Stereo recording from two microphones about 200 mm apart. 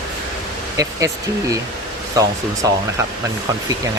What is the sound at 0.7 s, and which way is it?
Speech, 15° right (ahead or behind).